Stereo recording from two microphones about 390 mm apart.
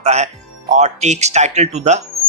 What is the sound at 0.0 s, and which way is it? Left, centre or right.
A woman's voice, centre.